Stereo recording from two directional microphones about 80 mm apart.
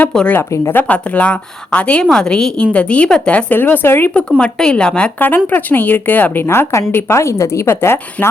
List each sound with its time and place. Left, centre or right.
0.1 s speech: centre
0.3 s a woman's voice: left
0.8 s speech: centre
4.1 s a woman's voice: centre; by 8.3 s left